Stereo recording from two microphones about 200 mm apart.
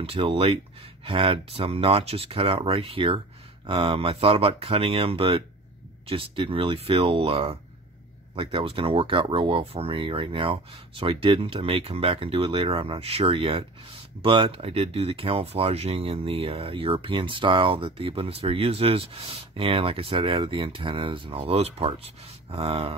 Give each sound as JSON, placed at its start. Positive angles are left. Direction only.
{"t": 0.0, "sound": "speech", "side_deg": -30}